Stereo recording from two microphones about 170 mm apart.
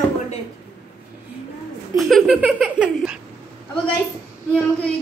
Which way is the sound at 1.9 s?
Centre (ahead or behind).